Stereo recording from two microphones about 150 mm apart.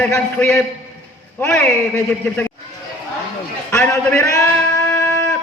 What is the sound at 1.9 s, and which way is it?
Speech, 10° left (ahead or behind).